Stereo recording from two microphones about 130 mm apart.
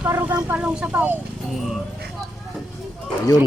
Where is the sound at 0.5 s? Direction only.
5° right (ahead or behind).